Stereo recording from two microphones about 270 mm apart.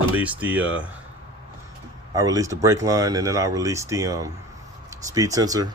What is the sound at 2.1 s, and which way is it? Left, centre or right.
Speech, centre.